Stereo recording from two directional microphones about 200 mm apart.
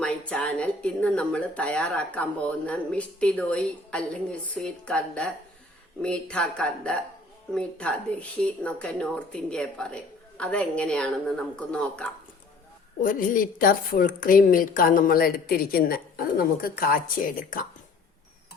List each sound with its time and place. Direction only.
0.0 s speech: 5° left (ahead or behind)
13.0 s a woman's voice: 40° left (ahead or behind)